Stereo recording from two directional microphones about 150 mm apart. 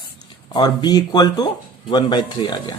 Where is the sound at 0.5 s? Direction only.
30° left (ahead or behind).